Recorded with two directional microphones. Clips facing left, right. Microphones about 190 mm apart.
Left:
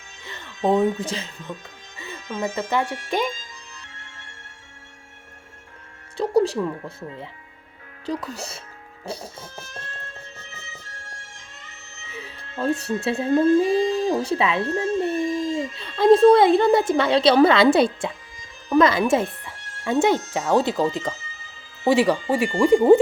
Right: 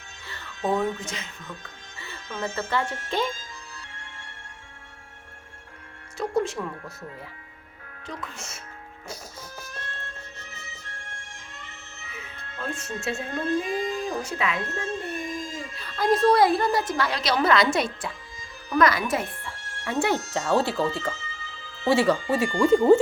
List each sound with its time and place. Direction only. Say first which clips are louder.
0.3 s speech: left 5 dB; 20° left (ahead or behind)
2.0 s speech: left 5 dB; 15° left (ahead or behind)
6.1 s music: left 6 dB; 35° left (ahead or behind)
8.0 s speech: left 9 dB; 35° left (ahead or behind)
12.1 s speech: left 8 dB; 35° left (ahead or behind); by 20.8 s 15° left (ahead or behind)
21.8 s speech: left 3 dB; 15° left (ahead or behind)